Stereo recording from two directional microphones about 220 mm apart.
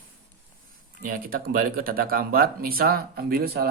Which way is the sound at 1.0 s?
40° right (ahead or behind).